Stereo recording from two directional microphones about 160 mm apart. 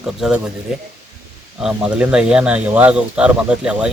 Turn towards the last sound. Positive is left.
turn(degrees=-5)  # may be behind; listen again after turning